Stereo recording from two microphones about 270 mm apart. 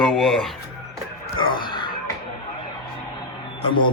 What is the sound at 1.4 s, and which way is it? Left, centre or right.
Wail, centre.